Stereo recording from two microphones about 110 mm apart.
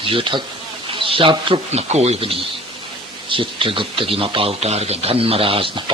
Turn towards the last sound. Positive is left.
turn(degrees=-55)  # may be behind; listen again after turning